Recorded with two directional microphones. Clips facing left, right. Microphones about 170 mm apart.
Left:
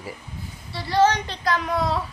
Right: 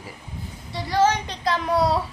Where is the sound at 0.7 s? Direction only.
10° right (ahead or behind).